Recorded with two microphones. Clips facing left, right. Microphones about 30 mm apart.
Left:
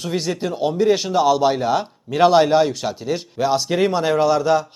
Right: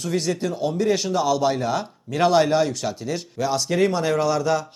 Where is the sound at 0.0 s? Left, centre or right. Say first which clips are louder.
Left 1 dB; centre.